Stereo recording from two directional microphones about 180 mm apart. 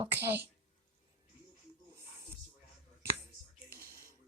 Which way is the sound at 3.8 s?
15° right (ahead or behind).